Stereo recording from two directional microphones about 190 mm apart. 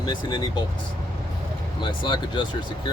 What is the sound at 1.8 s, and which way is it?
Speech, 25° left (ahead or behind).